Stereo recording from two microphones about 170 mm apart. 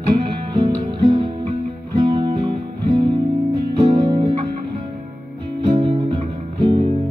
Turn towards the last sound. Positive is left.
turn(degrees=-30)  # may be behind; listen again after turning